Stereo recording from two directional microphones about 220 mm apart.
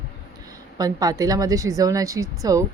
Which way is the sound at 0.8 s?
15° right (ahead or behind).